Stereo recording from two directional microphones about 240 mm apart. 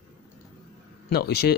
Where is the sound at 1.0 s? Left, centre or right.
Left.